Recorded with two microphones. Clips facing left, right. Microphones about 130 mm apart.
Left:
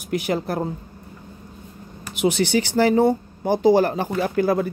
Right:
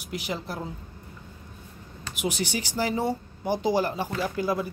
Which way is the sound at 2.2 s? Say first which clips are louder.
Left 10 dB; 65° left (ahead or behind).